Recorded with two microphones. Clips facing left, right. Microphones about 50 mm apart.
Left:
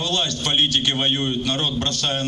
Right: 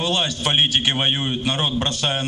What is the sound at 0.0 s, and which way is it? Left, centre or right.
A man's voice, centre.